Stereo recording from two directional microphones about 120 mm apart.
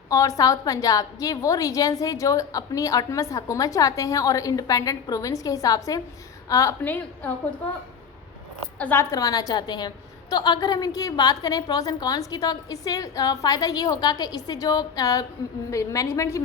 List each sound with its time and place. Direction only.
0.1 s a woman's voice: 30° left (ahead or behind)
8.8 s a woman's voice: 15° left (ahead or behind)
9.1 s a woman's voice: 30° left (ahead or behind)